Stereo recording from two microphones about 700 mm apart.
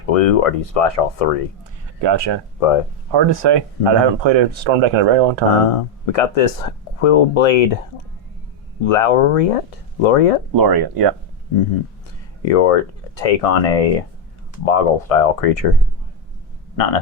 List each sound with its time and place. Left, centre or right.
0.1 s speech: left
2.0 s speech: right
2.6 s speech: left
3.1 s speech: right
5.7 s speech: left
8.8 s speech: left
10.5 s speech: right
12.5 s speech: left
16.7 s speech: left